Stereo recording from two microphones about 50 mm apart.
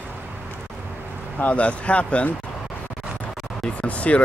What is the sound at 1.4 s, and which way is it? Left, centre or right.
Speech, left.